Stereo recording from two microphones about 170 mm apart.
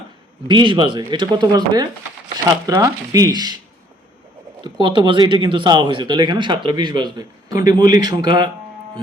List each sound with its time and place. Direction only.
0.4 s speech: 30° right (ahead or behind)
4.6 s speech: 25° right (ahead or behind)